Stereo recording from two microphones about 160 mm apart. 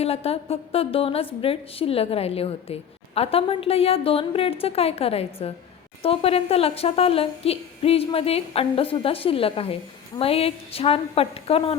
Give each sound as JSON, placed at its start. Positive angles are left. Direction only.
{"t": 0.0, "sound": "speech", "side_deg": 40}